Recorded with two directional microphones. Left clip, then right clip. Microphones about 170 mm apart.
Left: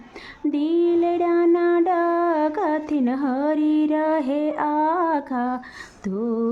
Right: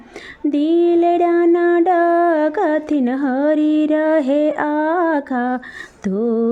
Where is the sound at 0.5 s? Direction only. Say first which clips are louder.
Right 5 dB; 25° right (ahead or behind).